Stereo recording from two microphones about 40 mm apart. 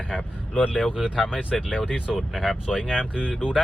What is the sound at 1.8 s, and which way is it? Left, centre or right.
Speech, centre.